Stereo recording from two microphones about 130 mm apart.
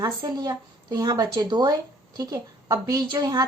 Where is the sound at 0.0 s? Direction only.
30° right (ahead or behind).